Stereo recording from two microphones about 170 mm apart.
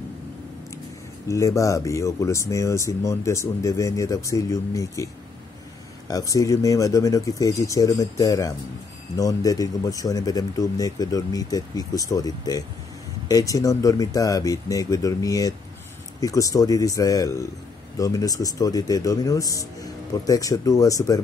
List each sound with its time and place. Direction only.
1.3 s speech: 15° left (ahead or behind)